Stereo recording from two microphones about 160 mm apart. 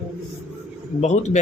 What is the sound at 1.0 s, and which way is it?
Speech, 45° left (ahead or behind).